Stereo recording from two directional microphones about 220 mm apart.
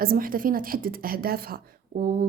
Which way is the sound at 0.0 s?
40° right (ahead or behind).